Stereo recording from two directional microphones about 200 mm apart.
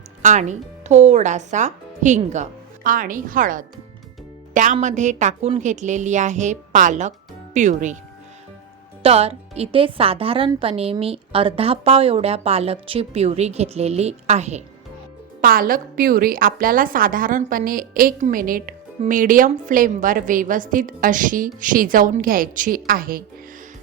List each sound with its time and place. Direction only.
0.2 s a woman's voice: 35° right (ahead or behind)
9.0 s a woman's voice: 30° right (ahead or behind)
15.4 s a woman's voice: 45° right (ahead or behind)